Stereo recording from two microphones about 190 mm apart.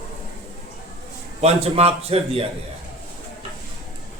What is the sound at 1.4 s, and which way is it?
A man's voice, 35° right (ahead or behind).